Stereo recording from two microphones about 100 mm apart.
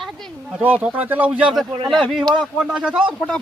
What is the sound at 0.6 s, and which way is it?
Speech, 15° right (ahead or behind).